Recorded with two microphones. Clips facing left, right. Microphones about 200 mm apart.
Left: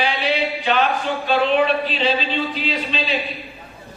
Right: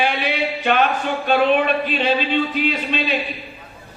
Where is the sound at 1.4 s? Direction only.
55° right (ahead or behind).